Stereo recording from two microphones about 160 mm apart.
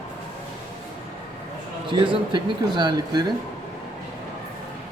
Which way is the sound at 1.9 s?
30° right (ahead or behind).